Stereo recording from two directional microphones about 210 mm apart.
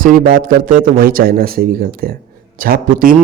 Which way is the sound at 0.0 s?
40° right (ahead or behind).